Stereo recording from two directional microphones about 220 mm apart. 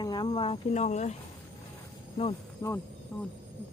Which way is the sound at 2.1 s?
25° left (ahead or behind).